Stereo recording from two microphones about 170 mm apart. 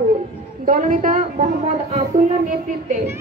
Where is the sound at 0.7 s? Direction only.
50° right (ahead or behind).